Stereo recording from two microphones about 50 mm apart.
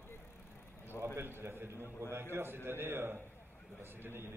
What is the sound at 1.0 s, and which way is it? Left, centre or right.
A man's voice, right.